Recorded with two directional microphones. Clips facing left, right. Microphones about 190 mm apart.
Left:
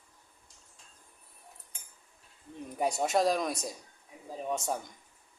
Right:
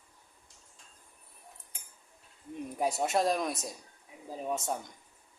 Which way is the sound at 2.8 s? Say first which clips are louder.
Left 1 dB; centre (ahead or behind).